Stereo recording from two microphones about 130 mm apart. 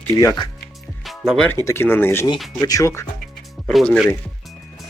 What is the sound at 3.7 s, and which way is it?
Speech, centre (ahead or behind).